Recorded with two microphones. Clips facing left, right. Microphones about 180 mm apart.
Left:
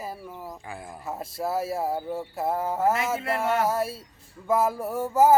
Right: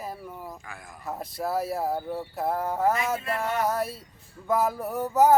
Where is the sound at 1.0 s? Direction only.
5° left (ahead or behind).